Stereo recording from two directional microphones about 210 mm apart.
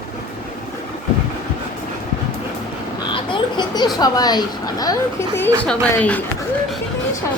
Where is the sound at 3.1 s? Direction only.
20° left (ahead or behind); by 6.2 s 5° left (ahead or behind).